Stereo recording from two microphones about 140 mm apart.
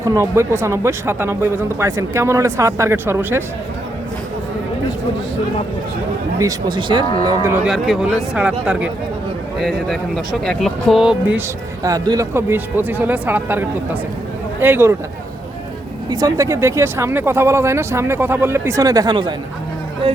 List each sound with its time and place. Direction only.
0.0 s speech: 20° right (ahead or behind)
6.4 s speech: 35° right (ahead or behind)
7.4 s speech: 15° right (ahead or behind)
7.7 s speech: centre (ahead or behind)
11.3 s speech: 25° right (ahead or behind)
16.0 s speech: 25° right (ahead or behind); by 20.2 s 40° right (ahead or behind)